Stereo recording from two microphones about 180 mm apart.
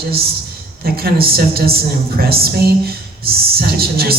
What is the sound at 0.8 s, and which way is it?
A woman's voice, 55° right (ahead or behind).